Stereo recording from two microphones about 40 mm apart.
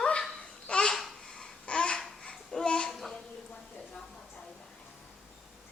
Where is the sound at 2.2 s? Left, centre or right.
Centre.